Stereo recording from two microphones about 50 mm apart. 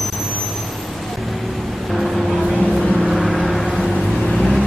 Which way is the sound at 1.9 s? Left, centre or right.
Centre.